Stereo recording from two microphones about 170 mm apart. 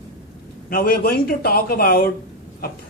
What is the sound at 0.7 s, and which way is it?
A man's voice, 60° left (ahead or behind).